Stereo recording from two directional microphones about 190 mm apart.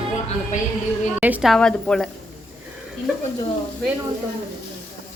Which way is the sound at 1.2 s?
5° right (ahead or behind).